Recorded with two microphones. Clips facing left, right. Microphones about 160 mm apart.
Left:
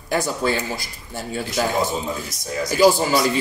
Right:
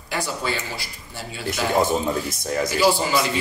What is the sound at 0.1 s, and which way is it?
Speech, 45° left (ahead or behind).